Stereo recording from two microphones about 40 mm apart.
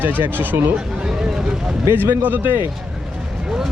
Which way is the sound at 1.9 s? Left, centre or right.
Right.